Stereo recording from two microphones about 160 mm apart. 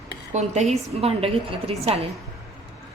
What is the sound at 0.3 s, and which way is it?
A woman's voice, 45° right (ahead or behind).